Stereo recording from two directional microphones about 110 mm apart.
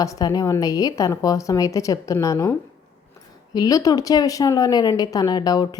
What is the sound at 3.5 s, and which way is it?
A woman's voice, 35° left (ahead or behind).